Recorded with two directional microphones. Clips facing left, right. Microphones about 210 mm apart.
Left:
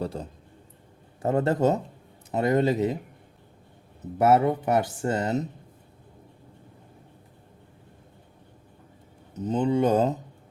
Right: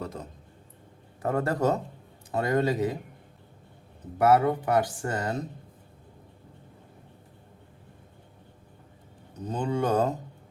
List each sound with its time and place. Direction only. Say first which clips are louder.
0.0 s speech: left 5 dB; 30° left (ahead or behind)
4.2 s speech: left 1 dB; 25° left (ahead or behind)
9.4 s speech: left 5 dB; 20° left (ahead or behind)